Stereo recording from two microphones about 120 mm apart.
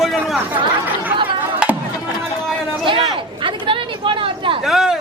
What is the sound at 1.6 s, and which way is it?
Music, 5° right (ahead or behind).